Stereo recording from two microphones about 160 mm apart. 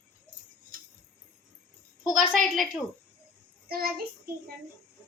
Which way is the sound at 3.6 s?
70° right (ahead or behind).